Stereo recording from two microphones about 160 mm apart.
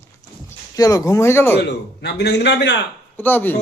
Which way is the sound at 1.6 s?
90° left.